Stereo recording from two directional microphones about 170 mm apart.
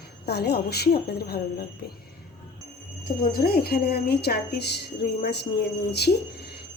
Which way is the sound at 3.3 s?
65° left (ahead or behind).